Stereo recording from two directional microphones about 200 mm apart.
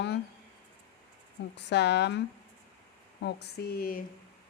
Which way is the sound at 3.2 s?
55° left (ahead or behind).